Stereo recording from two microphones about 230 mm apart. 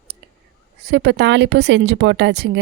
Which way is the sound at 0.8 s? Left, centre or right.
Right.